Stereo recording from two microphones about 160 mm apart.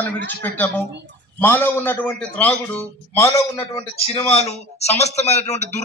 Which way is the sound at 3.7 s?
40° left (ahead or behind).